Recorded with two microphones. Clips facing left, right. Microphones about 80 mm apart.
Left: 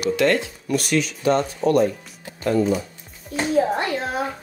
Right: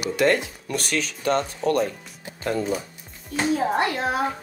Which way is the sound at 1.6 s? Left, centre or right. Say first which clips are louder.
Left 5 dB; left.